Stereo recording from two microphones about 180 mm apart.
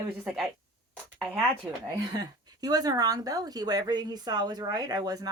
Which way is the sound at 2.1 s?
20° right (ahead or behind).